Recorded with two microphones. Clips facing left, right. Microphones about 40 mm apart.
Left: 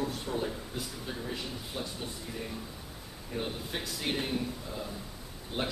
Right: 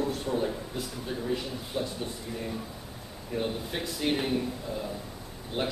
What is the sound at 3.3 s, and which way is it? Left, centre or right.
A man's voice, centre.